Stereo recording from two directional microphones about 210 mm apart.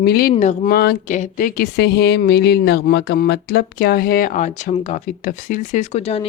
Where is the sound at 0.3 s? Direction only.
35° left (ahead or behind).